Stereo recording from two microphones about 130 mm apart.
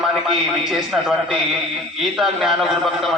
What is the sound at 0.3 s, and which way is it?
A man's voice, centre (ahead or behind).